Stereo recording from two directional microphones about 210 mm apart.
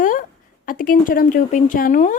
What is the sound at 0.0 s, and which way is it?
A woman's voice, 40° left (ahead or behind).